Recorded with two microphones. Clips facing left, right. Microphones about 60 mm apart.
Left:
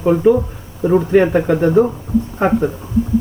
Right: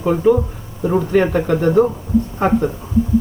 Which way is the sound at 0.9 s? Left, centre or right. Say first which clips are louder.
Left 3 dB; centre.